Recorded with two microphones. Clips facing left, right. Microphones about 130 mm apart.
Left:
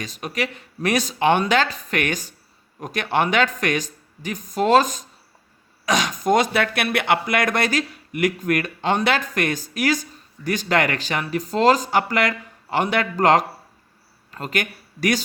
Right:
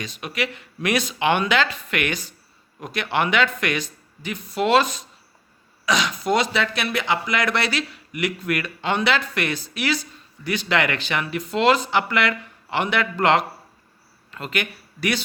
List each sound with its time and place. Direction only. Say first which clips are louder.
0.0 s speech: left 1 dB; 40° left (ahead or behind)